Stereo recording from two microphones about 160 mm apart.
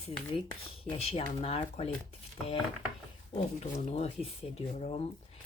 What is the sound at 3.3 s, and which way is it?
Speech, 45° left (ahead or behind).